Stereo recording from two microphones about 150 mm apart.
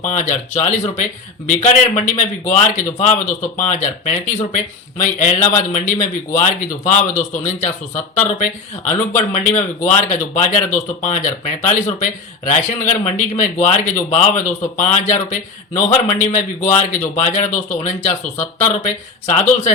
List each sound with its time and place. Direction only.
0.0 s speech: 55° left (ahead or behind)